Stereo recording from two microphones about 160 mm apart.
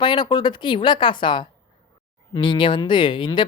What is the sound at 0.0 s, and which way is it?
Speech, 30° left (ahead or behind).